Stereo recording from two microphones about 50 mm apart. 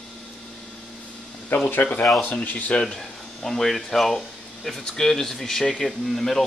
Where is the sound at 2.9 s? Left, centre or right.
Centre.